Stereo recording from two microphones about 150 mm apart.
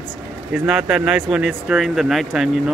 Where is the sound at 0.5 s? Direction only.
5° right (ahead or behind).